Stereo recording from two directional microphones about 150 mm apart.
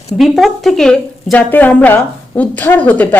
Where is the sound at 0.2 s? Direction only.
Centre (ahead or behind).